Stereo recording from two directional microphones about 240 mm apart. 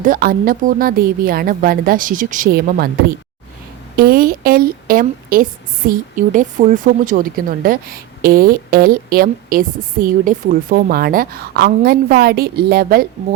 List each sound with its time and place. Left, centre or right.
0.0 s speech: right
3.9 s speech: right